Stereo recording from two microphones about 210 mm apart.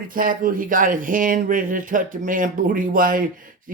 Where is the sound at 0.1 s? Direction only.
40° right (ahead or behind).